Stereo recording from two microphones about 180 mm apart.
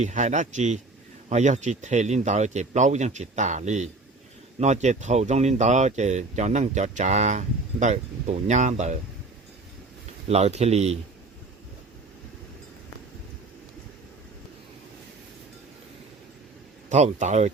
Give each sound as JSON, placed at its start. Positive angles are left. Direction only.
{"t": 0.0, "sound": "speech", "side_deg": -40}
{"t": 10.2, "sound": "speech", "side_deg": -35}
{"t": 16.9, "sound": "speech", "side_deg": -40}